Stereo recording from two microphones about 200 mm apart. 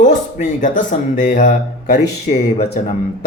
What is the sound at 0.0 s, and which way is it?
Speech, 40° left (ahead or behind).